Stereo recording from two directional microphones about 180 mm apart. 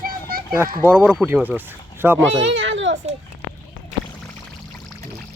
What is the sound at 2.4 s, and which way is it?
Speech, 90° right.